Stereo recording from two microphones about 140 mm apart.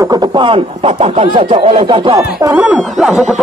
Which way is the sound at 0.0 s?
30° right (ahead or behind).